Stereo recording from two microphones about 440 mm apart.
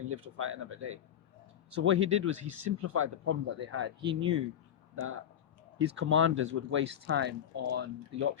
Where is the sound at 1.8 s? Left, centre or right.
Right.